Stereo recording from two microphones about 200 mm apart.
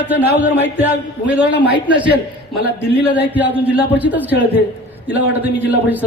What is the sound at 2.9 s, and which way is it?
Speech, 55° left (ahead or behind).